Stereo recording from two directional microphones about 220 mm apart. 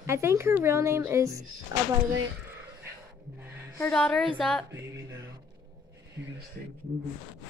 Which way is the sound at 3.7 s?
5° left (ahead or behind).